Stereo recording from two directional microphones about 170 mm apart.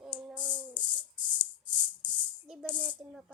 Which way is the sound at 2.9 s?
5° right (ahead or behind).